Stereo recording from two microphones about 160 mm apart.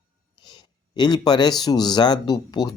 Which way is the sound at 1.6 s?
25° left (ahead or behind).